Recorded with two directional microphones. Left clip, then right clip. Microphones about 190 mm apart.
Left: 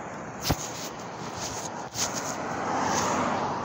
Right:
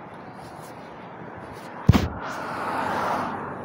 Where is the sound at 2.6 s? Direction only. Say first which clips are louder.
Right 1 dB; 45° left (ahead or behind).